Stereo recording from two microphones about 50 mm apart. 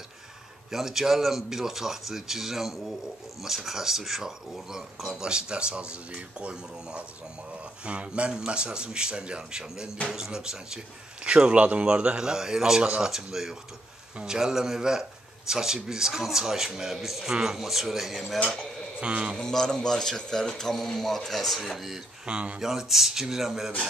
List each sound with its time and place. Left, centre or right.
0.7 s speech: centre
18.9 s speech: right
19.3 s a man's voice: centre
22.2 s speech: right
22.6 s speech: centre